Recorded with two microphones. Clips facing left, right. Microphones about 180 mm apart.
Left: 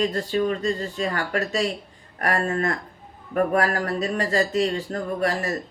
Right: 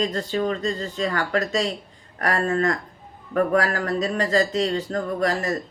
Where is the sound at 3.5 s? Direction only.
35° left (ahead or behind).